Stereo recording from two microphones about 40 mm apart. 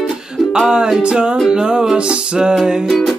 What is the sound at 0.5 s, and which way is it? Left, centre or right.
Music, centre.